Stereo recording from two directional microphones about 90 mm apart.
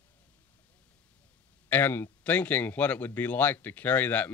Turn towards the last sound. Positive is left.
turn(degrees=20)  # may be behind; listen again after turning